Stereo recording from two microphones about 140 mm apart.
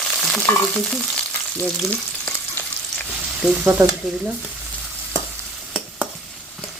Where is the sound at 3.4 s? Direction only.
5° right (ahead or behind).